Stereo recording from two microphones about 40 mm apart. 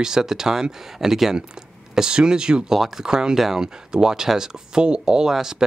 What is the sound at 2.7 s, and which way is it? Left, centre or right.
Speech, centre.